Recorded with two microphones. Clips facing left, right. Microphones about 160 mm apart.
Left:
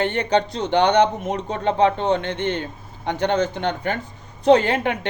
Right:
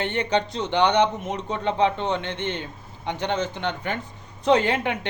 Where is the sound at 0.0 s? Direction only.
40° left (ahead or behind).